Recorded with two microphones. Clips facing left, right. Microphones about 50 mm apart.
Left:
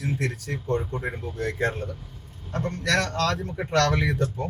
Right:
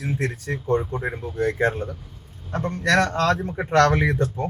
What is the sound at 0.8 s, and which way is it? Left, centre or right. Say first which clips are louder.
Speech: right 3 dB; centre.